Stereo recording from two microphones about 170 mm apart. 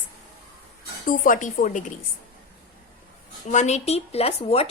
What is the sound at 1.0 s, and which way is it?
Speech, 55° left (ahead or behind).